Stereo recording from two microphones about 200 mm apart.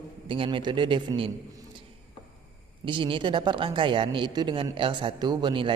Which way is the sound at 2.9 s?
25° right (ahead or behind).